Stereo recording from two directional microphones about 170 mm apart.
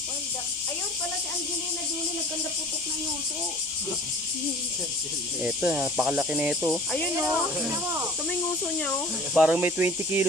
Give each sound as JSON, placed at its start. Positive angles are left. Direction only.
{"t": 5.4, "sound": "speech", "side_deg": -10}
{"t": 9.3, "sound": "speech", "side_deg": -5}